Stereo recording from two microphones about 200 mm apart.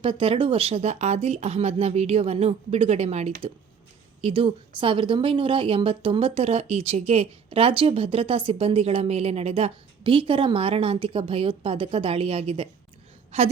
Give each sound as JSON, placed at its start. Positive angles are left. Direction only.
{"t": 0.0, "sound": "a woman's voice", "side_deg": -25}